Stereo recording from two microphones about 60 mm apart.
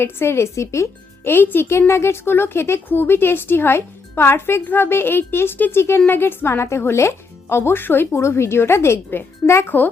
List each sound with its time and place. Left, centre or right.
0.0 s speech: left
1.3 s speech: left
9.6 s speech: left